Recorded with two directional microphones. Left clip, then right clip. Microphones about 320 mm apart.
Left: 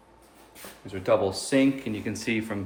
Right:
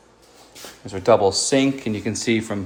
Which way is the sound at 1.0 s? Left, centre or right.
Centre.